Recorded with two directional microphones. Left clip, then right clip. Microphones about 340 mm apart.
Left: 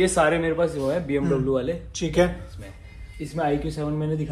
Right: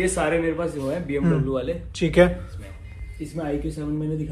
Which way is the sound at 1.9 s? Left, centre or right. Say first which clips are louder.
Right 5 dB; centre.